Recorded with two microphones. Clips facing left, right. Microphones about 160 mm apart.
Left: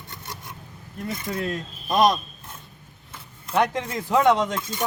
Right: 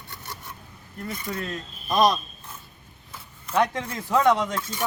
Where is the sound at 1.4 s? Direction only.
15° left (ahead or behind).